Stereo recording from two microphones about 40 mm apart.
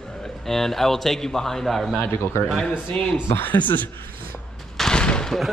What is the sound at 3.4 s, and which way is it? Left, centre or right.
Speech, left.